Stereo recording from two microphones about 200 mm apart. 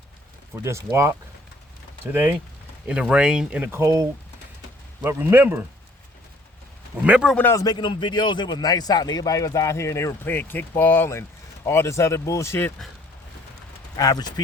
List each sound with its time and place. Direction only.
0.5 s speech: 15° right (ahead or behind)
2.8 s speech: 5° right (ahead or behind)
6.9 s speech: 5° right (ahead or behind)
7.3 s a man's voice: 10° left (ahead or behind)
13.9 s speech: 20° left (ahead or behind)